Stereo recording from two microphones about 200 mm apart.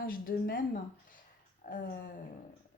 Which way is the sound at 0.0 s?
45° left (ahead or behind).